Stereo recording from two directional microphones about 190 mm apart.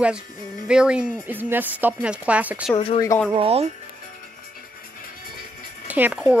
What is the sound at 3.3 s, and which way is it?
Speech, 30° right (ahead or behind).